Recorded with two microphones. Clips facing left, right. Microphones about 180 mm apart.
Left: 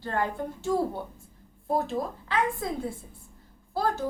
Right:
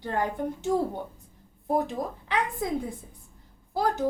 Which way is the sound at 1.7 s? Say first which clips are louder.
Right 1 dB; 15° right (ahead or behind).